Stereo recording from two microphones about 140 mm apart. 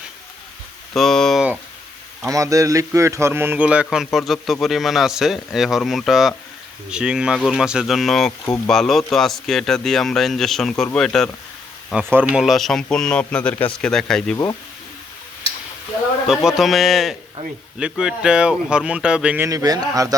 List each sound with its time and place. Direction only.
0.9 s speech: centre (ahead or behind)
2.2 s speech: 25° right (ahead or behind); by 11.3 s 5° left (ahead or behind)
12.0 s speech: 15° right (ahead or behind)
12.4 s speech: centre (ahead or behind)
16.2 s speech: 5° right (ahead or behind)
19.5 s speech: 25° right (ahead or behind)